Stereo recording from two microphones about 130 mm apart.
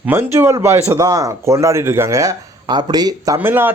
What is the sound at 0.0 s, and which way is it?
Speech, 15° right (ahead or behind).